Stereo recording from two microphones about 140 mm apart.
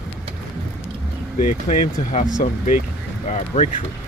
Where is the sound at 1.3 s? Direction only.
60° left (ahead or behind).